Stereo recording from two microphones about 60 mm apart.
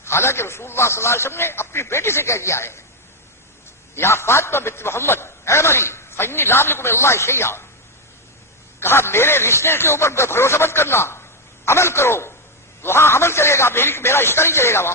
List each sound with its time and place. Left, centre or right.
0.0 s a man's voice: left
3.9 s a man's voice: left
8.8 s a man's voice: left